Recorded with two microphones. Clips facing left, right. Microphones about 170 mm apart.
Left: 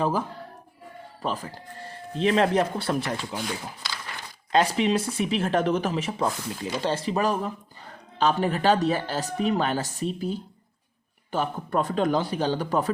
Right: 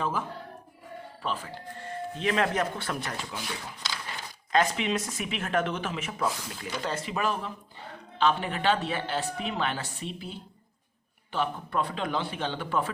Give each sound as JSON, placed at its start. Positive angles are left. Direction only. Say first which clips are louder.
{"t": 0.0, "sound": "speech", "louder": "left 5 dB", "side_deg": 35}
{"t": 4.5, "sound": "speech", "louder": "left 4 dB", "side_deg": 35}